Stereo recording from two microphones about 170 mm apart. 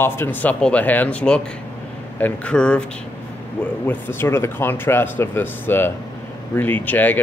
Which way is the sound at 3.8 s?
15° left (ahead or behind).